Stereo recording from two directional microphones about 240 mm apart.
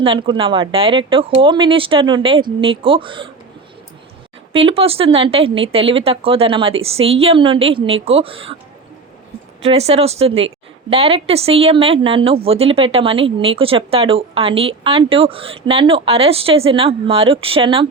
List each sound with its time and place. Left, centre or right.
0.0 s a woman's voice: right
4.5 s a woman's voice: right
9.6 s a woman's voice: right